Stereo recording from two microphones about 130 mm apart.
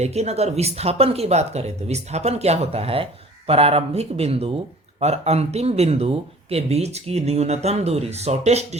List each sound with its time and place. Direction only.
0.0 s speech: 55° right (ahead or behind)